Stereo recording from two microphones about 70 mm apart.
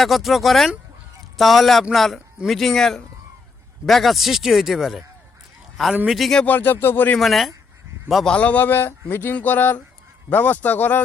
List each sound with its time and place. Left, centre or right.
0.0 s speech: centre
6.1 s speech: centre
6.4 s speech: left
7.2 s a man's voice: centre
8.3 s speech: centre